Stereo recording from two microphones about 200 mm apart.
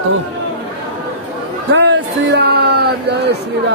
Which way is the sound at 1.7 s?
60° right (ahead or behind).